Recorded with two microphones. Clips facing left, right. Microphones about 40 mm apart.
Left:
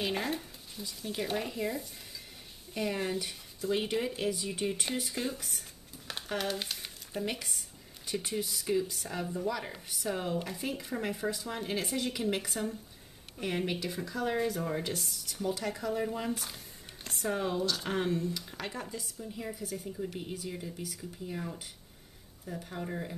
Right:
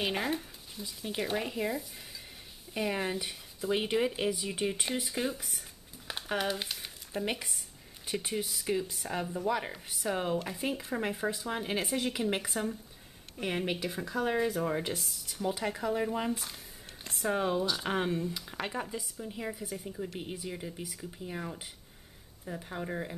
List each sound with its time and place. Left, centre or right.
0.0 s speech: centre
2.7 s speech: centre
6.0 s crumpling: centre
7.2 s speech: centre
16.3 s speech: centre